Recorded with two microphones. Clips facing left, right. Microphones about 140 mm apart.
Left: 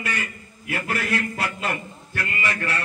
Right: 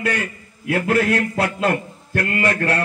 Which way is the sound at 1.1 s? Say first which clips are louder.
Right 6 dB; 60° right (ahead or behind).